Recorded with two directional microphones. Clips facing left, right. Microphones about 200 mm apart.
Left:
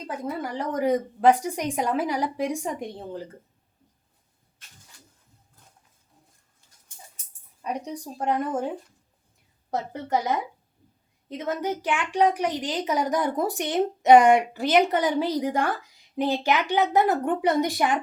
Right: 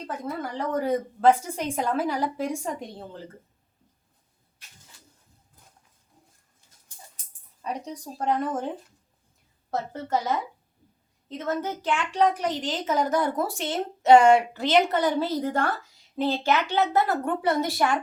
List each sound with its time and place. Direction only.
0.3 s a woman's voice: 10° left (ahead or behind)
8.2 s a woman's voice: 10° left (ahead or behind)
9.6 s a woman's voice: 15° left (ahead or behind)